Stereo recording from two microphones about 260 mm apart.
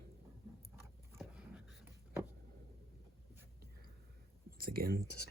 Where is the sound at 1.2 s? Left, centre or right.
Centre.